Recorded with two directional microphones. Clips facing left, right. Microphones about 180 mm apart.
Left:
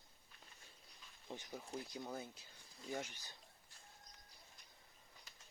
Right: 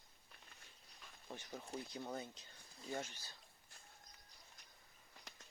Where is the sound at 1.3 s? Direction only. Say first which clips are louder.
Left 1 dB; 15° left (ahead or behind).